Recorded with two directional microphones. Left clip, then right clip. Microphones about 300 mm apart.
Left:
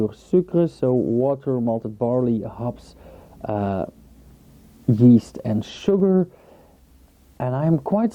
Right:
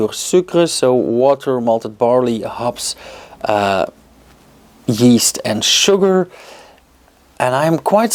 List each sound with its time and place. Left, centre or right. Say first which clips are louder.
0.0 s speech: right 6 dB; centre
0.9 s speech: right 6 dB; centre
1.2 s speech: right 9 dB; centre
4.9 s speech: right 4 dB; centre